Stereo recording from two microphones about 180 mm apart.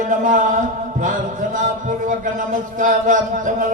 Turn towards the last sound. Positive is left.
turn(degrees=-45)  # may be behind; listen again after turning